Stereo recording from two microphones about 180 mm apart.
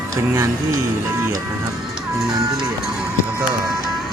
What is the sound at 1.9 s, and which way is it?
Music, 5° right (ahead or behind).